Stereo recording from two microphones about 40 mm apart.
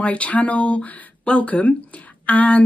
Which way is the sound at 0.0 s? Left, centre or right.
Left.